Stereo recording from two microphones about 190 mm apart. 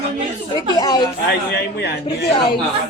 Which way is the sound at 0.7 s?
20° left (ahead or behind).